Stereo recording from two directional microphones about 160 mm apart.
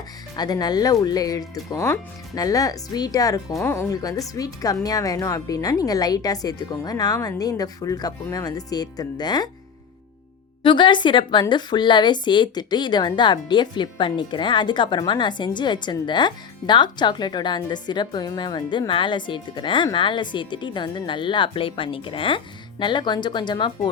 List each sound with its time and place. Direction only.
0.3 s a woman's voice: 25° left (ahead or behind)
10.6 s a woman's voice: 30° left (ahead or behind)